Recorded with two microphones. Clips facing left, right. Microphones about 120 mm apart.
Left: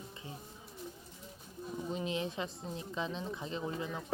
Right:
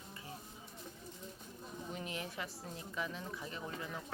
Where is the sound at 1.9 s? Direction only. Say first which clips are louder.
Left 7 dB; 20° left (ahead or behind).